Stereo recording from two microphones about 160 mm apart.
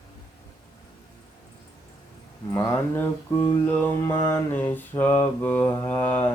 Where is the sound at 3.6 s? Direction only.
10° left (ahead or behind).